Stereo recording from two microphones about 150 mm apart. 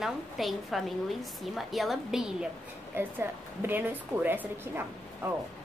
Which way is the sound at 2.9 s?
15° right (ahead or behind).